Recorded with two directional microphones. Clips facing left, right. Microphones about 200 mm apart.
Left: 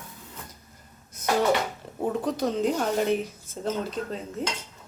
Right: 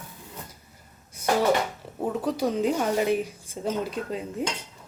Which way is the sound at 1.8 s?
5° right (ahead or behind).